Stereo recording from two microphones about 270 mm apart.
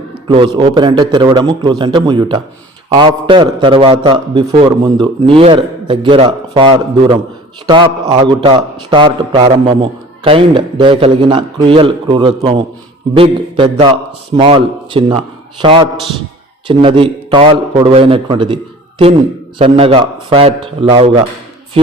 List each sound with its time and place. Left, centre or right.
0.3 s a man's voice: centre